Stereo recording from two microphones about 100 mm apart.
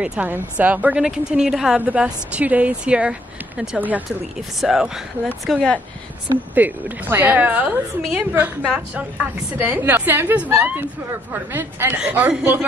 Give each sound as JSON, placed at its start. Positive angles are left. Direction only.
{"t": 0.0, "sound": "a woman's voice", "side_deg": -15}
{"t": 4.4, "sound": "speech", "side_deg": 0}
{"t": 6.5, "sound": "a woman's voice", "side_deg": -20}